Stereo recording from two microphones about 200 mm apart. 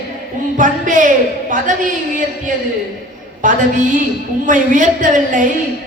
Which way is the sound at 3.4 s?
40° right (ahead or behind).